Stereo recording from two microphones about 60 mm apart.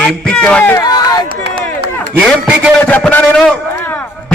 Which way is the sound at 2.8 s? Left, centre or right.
Left.